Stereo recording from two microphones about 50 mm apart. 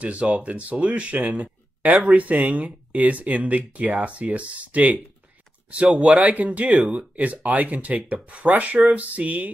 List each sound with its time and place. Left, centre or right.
0.0 s speech: right
6.0 s speech: right